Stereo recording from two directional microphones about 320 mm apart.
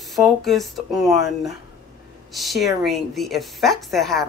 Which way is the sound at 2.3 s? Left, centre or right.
Centre.